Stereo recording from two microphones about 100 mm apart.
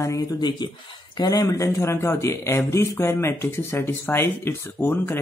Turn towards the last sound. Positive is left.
turn(degrees=25)  # may be behind; listen again after turning